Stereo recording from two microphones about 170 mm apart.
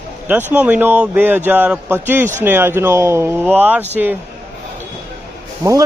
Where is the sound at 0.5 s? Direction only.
10° right (ahead or behind).